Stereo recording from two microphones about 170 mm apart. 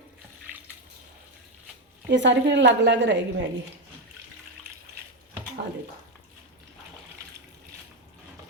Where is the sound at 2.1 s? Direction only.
90° right.